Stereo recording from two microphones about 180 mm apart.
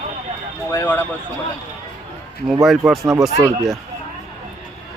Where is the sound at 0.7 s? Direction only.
10° left (ahead or behind).